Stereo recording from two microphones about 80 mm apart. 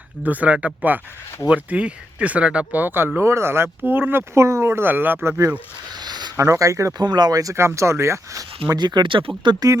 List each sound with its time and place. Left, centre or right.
0.2 s speech: centre
5.9 s a sound: right
6.3 s speech: right
7.0 s speech: right
7.5 s speech: right
8.7 s speech: right